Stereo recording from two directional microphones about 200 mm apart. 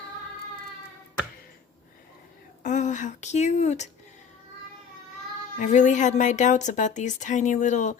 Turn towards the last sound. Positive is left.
turn(degrees=35)  # may be behind; listen again after turning